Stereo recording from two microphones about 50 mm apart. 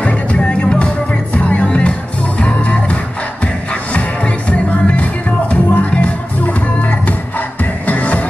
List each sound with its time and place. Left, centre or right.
0.0 s music: left